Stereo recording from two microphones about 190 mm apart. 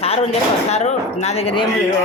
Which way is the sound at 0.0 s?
30° left (ahead or behind).